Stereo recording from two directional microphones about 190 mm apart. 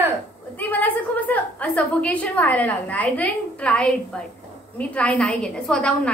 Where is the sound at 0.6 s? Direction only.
10° left (ahead or behind).